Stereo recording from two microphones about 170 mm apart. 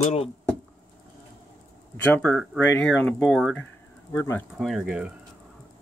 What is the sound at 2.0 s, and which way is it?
Speech, 10° left (ahead or behind).